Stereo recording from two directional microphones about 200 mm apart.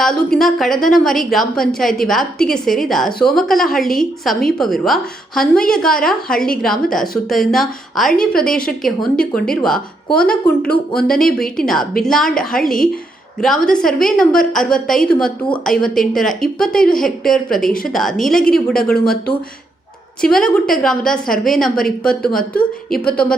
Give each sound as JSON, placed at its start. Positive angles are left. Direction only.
{"t": 0.0, "sound": "a woman's voice", "side_deg": 0}
{"t": 18.9, "sound": "a woman's voice", "side_deg": 50}
{"t": 20.2, "sound": "a woman's voice", "side_deg": 5}
{"t": 22.3, "sound": "a woman's voice", "side_deg": 45}